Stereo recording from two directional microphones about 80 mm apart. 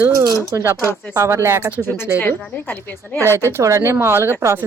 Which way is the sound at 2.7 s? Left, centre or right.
Left.